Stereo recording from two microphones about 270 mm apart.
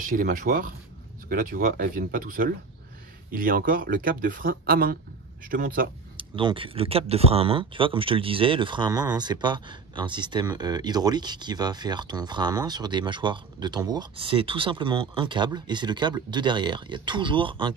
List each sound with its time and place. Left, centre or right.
0.0 s speech: right
6.1 s speech: centre